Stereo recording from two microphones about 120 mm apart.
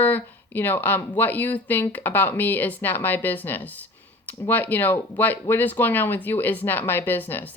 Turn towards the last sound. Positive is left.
turn(degrees=15)  # may be behind; listen again after turning